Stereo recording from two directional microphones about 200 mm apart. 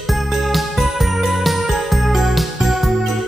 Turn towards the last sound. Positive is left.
turn(degrees=0)  # may be behind; listen again after turning